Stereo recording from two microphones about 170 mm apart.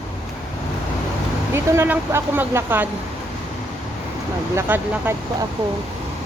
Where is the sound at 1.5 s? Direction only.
15° right (ahead or behind).